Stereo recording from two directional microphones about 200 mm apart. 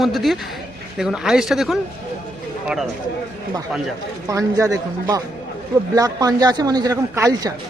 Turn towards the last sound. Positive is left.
turn(degrees=-15)  # may be behind; listen again after turning